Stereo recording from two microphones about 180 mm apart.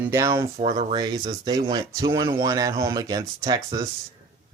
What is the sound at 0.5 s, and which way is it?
Speech, 30° right (ahead or behind).